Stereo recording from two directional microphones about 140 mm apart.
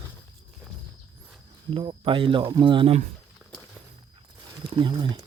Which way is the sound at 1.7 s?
40° right (ahead or behind).